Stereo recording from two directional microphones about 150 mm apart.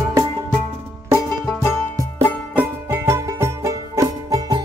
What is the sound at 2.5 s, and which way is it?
Music, 15° right (ahead or behind).